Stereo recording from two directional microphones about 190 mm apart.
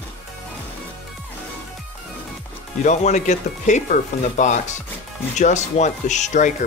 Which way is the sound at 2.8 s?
40° left (ahead or behind).